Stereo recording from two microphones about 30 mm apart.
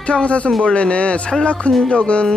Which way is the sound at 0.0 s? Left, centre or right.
Left.